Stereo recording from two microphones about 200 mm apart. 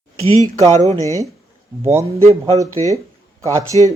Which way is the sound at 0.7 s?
35° right (ahead or behind).